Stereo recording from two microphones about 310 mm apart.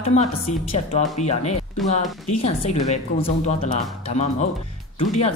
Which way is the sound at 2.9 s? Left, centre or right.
Left.